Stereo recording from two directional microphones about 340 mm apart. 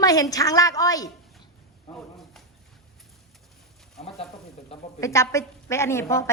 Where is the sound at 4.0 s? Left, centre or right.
Centre.